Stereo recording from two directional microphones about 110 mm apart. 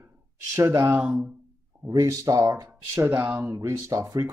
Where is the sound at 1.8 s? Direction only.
30° right (ahead or behind).